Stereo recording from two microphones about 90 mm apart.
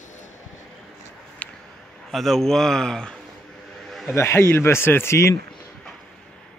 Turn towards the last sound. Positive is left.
turn(degrees=30)  # may be behind; listen again after turning